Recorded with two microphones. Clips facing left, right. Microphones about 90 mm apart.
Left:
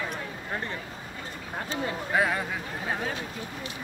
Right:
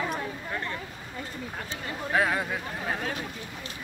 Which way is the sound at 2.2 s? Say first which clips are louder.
Right 1 dB; centre (ahead or behind).